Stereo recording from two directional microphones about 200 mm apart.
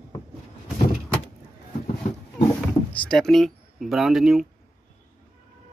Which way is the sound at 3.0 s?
Centre (ahead or behind).